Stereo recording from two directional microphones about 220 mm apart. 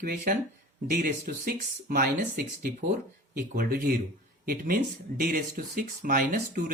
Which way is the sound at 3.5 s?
40° right (ahead or behind).